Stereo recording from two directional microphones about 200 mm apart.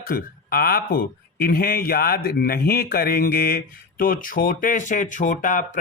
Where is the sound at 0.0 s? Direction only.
45° left (ahead or behind).